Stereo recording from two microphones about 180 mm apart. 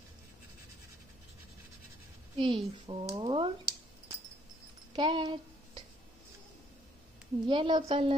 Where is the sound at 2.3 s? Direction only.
30° right (ahead or behind).